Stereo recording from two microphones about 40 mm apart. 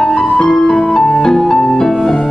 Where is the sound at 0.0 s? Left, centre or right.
Centre.